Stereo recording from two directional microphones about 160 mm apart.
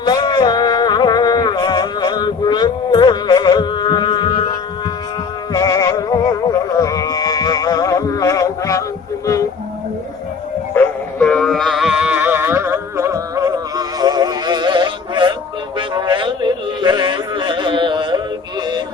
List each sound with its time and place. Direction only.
0.0 s music: 25° left (ahead or behind)
5.5 s music: 20° left (ahead or behind)
10.8 s music: 5° left (ahead or behind); by 18.2 s 30° right (ahead or behind)